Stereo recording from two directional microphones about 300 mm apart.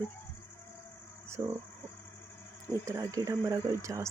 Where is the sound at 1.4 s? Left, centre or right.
Centre.